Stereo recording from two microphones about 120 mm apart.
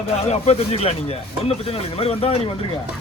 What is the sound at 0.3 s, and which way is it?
A man's voice, 60° left (ahead or behind).